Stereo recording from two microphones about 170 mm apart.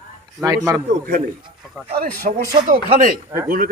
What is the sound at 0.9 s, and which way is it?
Speech, 55° right (ahead or behind).